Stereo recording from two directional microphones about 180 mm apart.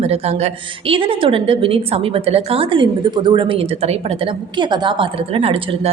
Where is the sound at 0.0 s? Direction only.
35° right (ahead or behind).